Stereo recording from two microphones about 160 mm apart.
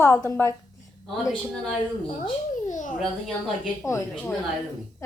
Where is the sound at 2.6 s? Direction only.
55° left (ahead or behind).